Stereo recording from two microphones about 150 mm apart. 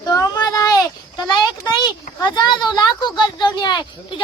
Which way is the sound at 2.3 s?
30° left (ahead or behind).